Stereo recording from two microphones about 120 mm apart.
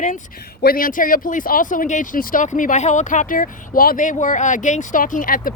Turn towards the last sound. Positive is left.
turn(degrees=90)